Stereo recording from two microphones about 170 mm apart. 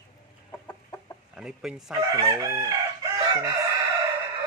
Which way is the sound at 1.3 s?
5° right (ahead or behind).